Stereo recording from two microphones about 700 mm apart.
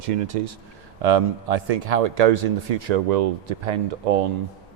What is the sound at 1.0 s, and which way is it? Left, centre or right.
Speech, right.